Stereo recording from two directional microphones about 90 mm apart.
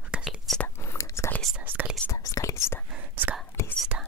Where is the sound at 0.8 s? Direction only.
30° left (ahead or behind).